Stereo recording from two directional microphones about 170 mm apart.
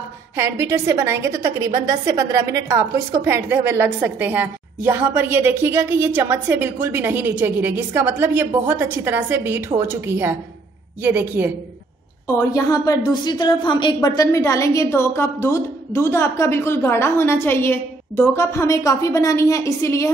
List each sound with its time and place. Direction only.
0.4 s a woman's voice: 15° right (ahead or behind)
12.4 s a woman's voice: 20° left (ahead or behind)